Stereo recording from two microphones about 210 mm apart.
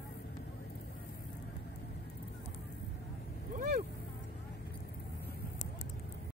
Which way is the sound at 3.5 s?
45° right (ahead or behind).